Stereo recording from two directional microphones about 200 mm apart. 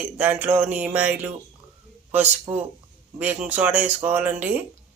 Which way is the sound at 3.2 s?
5° right (ahead or behind).